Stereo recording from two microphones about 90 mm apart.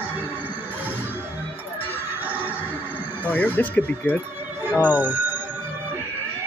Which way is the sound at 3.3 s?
20° left (ahead or behind).